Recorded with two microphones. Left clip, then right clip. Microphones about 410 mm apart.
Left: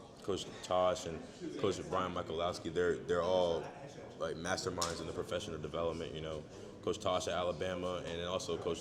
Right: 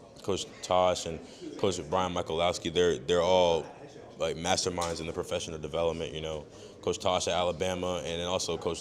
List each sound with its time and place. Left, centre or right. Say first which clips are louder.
0.3 s speech: right 7 dB; right